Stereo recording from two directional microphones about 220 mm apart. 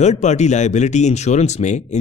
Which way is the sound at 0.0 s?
30° left (ahead or behind).